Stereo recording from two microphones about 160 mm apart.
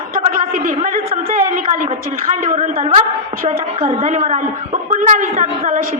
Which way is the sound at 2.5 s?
40° right (ahead or behind).